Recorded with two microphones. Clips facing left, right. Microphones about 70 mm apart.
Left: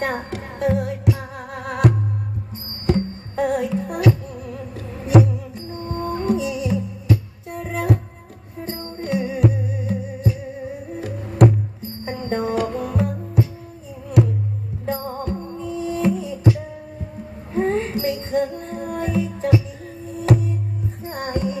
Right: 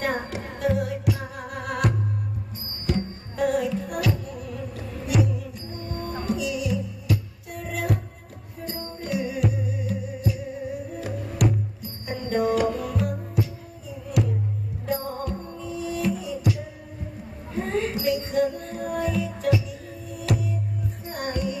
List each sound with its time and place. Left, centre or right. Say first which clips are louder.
0.4 s music: left 5 dB; left
2.9 s music: left 6 dB; left
14.9 s music: left 3 dB; left